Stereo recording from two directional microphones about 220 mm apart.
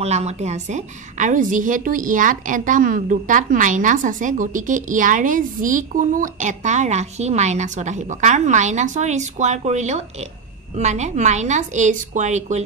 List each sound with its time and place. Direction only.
0.0 s a woman's voice: 30° right (ahead or behind)